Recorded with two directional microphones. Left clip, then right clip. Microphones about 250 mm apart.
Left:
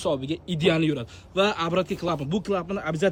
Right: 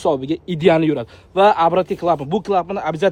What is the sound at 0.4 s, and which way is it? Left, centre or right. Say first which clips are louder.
Speech: right 8 dB; centre.